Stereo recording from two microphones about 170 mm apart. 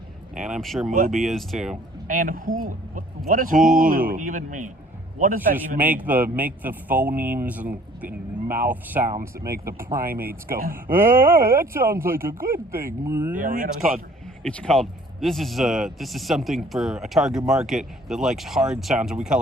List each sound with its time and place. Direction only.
0.3 s speech: 5° right (ahead or behind)
0.9 s speech: 50° right (ahead or behind)
1.1 s speech: centre (ahead or behind)
2.0 s speech: 55° right (ahead or behind)
5.5 s a man's voice: 10° right (ahead or behind)
13.3 s speech: 50° right (ahead or behind)
14.4 s speech: 5° left (ahead or behind)